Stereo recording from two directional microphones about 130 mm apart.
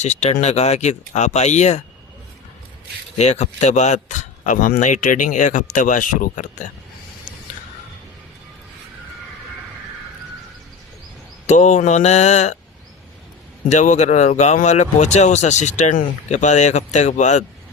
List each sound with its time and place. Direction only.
0.0 s speech: 60° left (ahead or behind)
3.2 s speech: 60° left (ahead or behind); by 6.7 s 80° left
11.4 s speech: 65° left (ahead or behind)
13.7 s speech: 65° left (ahead or behind)